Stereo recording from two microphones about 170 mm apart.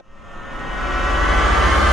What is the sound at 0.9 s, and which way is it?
Train, centre (ahead or behind).